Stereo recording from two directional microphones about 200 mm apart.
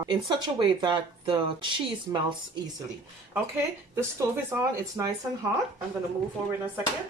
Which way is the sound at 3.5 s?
15° right (ahead or behind).